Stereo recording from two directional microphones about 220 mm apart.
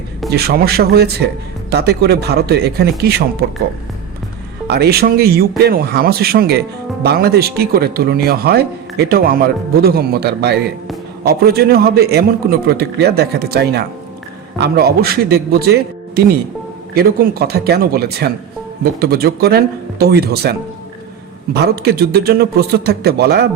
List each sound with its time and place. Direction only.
0.3 s speech: 45° right (ahead or behind)
4.7 s speech: 45° right (ahead or behind)